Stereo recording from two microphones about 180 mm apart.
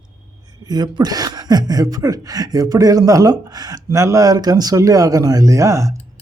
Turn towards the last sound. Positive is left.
turn(degrees=-15)  # may be behind; listen again after turning